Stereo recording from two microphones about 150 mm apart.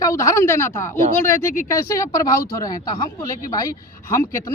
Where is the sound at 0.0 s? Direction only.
20° left (ahead or behind).